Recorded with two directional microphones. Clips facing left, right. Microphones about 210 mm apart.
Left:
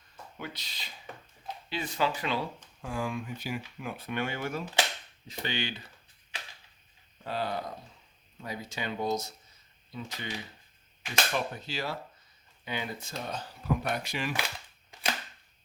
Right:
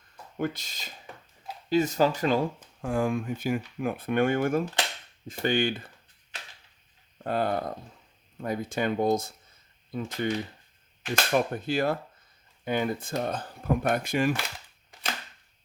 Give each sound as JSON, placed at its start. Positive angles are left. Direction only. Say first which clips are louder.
{"t": 0.3, "sound": "speech", "louder": "right 11 dB", "side_deg": -50}
{"t": 7.3, "sound": "speech", "louder": "right 6 dB", "side_deg": -50}